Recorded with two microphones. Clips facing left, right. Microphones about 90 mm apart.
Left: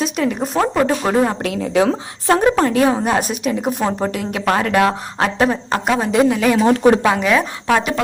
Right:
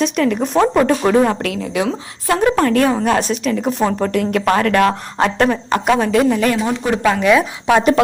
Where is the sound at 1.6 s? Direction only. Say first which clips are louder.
Left 4 dB; 40° left (ahead or behind).